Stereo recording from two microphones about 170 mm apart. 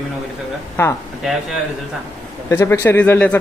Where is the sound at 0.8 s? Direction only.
15° left (ahead or behind).